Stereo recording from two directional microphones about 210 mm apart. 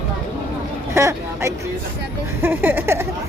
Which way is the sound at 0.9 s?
15° right (ahead or behind).